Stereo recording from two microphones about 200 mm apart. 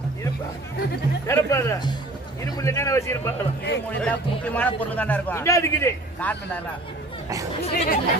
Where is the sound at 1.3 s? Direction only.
15° left (ahead or behind).